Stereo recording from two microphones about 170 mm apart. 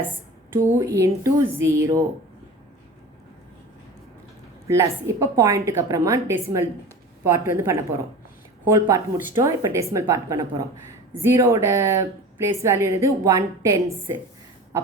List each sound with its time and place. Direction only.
0.5 s a woman's voice: 15° right (ahead or behind)
4.7 s a woman's voice: 15° right (ahead or behind)